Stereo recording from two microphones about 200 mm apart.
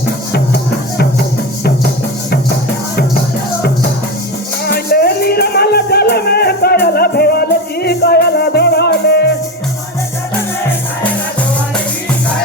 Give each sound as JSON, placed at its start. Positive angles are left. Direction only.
{"t": 0.3, "sound": "music", "side_deg": 50}
{"t": 4.6, "sound": "music", "side_deg": 50}